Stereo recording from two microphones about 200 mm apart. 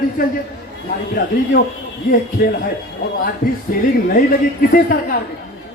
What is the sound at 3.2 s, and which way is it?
Speech, 45° left (ahead or behind).